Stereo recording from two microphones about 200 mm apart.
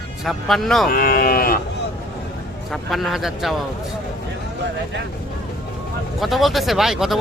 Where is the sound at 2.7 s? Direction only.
Centre (ahead or behind).